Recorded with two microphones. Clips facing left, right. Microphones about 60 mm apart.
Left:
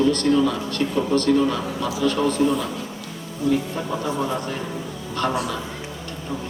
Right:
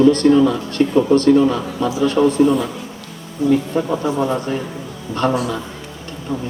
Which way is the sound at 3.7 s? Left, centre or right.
Centre.